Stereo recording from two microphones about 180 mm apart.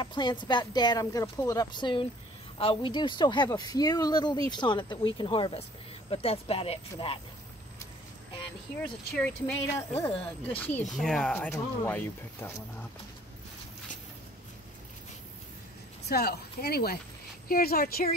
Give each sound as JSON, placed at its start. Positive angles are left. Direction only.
{"t": 0.0, "sound": "speech", "side_deg": 25}
{"t": 8.8, "sound": "speech", "side_deg": 5}
{"t": 16.1, "sound": "speech", "side_deg": 60}